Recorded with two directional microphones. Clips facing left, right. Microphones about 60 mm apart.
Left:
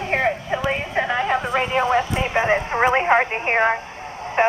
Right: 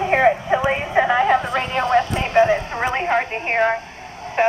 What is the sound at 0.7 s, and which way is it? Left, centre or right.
Speech, centre.